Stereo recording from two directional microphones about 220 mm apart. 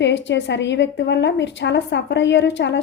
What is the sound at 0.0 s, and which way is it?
A woman's voice, 55° left (ahead or behind).